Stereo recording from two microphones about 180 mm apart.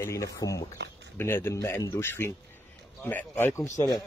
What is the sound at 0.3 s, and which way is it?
A man's voice, 15° left (ahead or behind).